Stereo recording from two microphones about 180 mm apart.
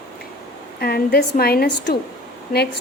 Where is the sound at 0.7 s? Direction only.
60° left (ahead or behind).